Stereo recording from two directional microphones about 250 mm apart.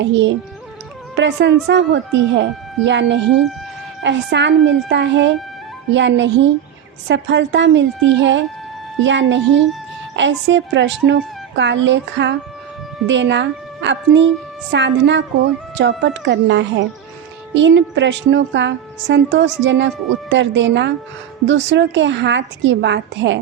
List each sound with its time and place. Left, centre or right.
0.0 s a woman's voice: right